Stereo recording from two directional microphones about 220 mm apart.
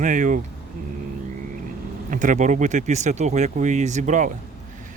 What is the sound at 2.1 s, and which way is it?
Speech, 35° right (ahead or behind).